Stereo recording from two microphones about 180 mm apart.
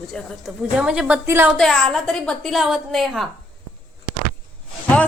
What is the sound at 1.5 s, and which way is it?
A woman's voice, centre (ahead or behind).